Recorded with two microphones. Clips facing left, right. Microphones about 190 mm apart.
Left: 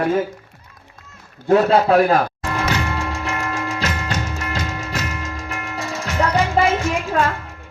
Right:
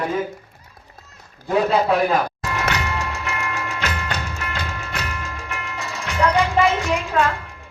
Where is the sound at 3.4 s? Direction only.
35° left (ahead or behind).